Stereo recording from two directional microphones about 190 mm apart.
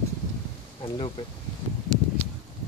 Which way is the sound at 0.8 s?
25° left (ahead or behind).